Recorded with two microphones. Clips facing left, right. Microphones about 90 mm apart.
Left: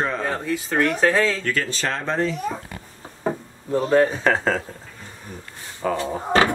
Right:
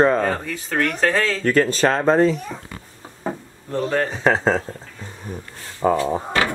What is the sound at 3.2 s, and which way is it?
Knock, 10° left (ahead or behind).